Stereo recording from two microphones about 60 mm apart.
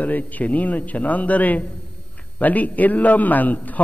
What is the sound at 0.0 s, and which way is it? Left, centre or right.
Speech, left.